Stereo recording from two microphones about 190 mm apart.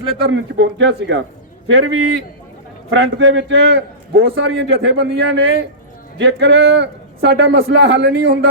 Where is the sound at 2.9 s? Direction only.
70° right (ahead or behind).